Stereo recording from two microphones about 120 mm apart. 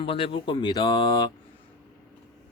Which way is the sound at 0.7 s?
35° left (ahead or behind).